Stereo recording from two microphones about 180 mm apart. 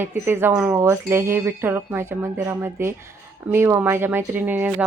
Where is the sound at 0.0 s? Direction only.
15° right (ahead or behind).